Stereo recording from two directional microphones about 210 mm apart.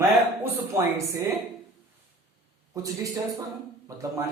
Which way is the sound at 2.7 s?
15° right (ahead or behind).